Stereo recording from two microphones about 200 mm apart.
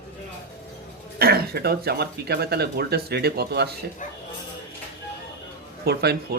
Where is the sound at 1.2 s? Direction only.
50° right (ahead or behind).